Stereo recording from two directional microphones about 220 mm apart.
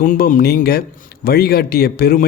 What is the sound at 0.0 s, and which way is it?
Speech, 40° left (ahead or behind).